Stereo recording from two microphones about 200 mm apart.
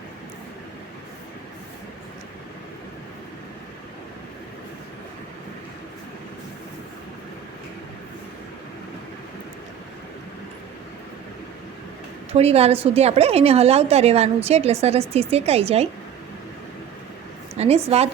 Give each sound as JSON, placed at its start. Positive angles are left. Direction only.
{"t": 12.3, "sound": "a woman's voice", "side_deg": -30}
{"t": 17.8, "sound": "a woman's voice", "side_deg": -30}